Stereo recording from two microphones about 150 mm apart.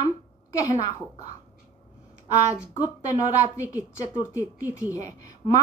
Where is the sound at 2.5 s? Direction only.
25° left (ahead or behind).